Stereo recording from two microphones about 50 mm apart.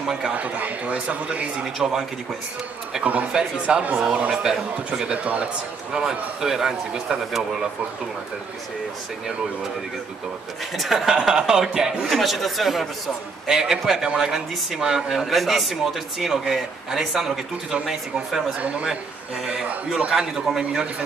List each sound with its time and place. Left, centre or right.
0.0 s a man's voice: centre
0.3 s speech: right; by 2.0 s centre
3.0 s speech: right
3.3 s speech: centre
5.9 s speech: centre
10.8 s speech: centre
20.1 s speech: centre